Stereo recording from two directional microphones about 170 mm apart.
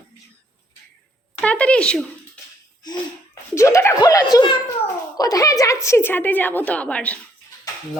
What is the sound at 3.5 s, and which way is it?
A woman's voice, 15° left (ahead or behind).